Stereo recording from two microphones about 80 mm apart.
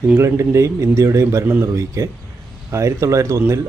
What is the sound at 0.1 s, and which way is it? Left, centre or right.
Speech, right.